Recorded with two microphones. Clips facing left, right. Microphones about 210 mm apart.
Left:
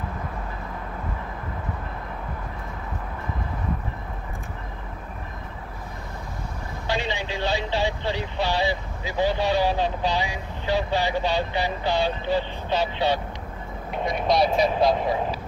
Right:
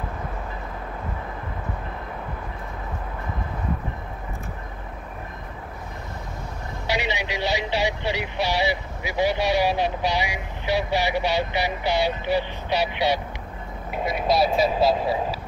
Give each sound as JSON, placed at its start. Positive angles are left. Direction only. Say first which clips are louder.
{"t": 6.9, "sound": "speech", "louder": "right 1 dB", "side_deg": -15}